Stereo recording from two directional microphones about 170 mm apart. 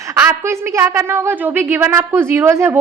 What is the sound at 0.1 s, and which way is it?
A woman's voice, 15° right (ahead or behind).